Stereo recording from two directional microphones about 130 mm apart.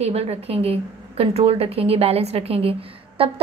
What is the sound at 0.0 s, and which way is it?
A woman's voice, 55° right (ahead or behind).